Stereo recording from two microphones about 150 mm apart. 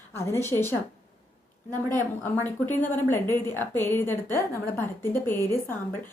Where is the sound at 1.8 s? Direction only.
15° left (ahead or behind).